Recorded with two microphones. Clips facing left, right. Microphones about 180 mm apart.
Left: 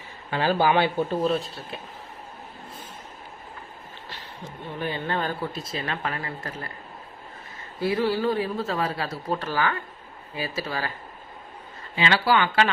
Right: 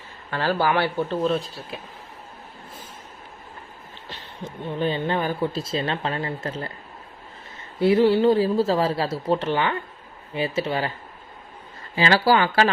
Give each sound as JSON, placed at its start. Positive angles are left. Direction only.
{"t": 0.3, "sound": "speech", "side_deg": 15}
{"t": 1.3, "sound": "speech", "side_deg": 0}
{"t": 4.8, "sound": "speech", "side_deg": -20}
{"t": 5.5, "sound": "speech", "side_deg": -30}
{"t": 7.8, "sound": "speech", "side_deg": -25}
{"t": 11.9, "sound": "speech", "side_deg": -40}